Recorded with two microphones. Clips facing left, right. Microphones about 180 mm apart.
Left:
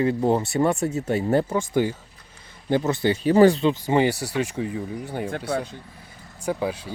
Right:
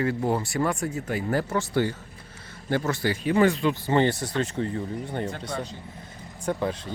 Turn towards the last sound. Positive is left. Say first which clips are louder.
# left 1 dB
turn(degrees=5)  # may be behind; listen again after turning